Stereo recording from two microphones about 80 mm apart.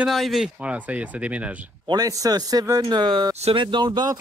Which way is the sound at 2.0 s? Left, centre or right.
Right.